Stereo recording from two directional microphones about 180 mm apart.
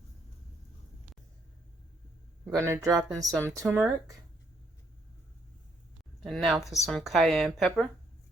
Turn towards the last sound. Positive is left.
turn(degrees=0)  # may be behind; listen again after turning